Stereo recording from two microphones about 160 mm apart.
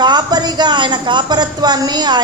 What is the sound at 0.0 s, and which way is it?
A woman's voice, 25° right (ahead or behind).